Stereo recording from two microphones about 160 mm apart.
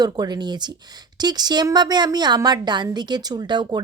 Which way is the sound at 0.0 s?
25° right (ahead or behind).